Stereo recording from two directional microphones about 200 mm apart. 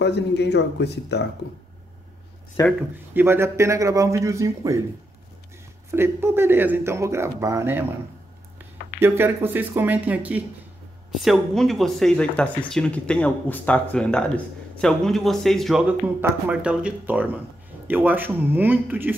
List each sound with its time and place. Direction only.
0.0 s speech: 60° left (ahead or behind)
2.6 s speech: 15° left (ahead or behind)
3.2 s speech: 10° right (ahead or behind)
5.9 s speech: 10° right (ahead or behind)
9.0 s speech: 10° right (ahead or behind)